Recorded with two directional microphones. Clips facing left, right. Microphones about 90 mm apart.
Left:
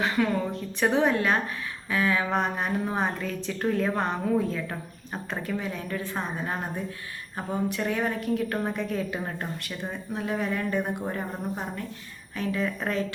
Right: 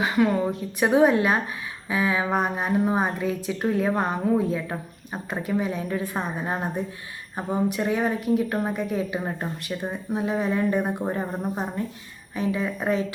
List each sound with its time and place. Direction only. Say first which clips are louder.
0.0 s a woman's voice: right 4 dB; 15° right (ahead or behind)